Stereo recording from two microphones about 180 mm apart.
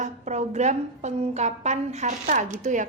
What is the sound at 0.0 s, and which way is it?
A woman's voice, 40° right (ahead or behind).